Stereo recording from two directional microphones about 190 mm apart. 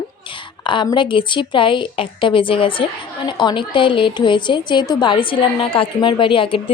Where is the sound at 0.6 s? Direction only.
25° left (ahead or behind).